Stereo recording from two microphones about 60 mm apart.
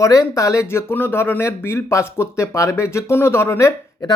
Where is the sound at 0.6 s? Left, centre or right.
Left.